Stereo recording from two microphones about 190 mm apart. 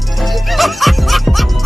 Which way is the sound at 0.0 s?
Centre (ahead or behind).